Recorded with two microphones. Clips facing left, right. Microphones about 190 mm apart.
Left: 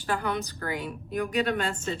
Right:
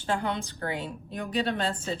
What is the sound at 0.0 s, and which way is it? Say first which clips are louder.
A woman's voice: even; 25° right (ahead or behind).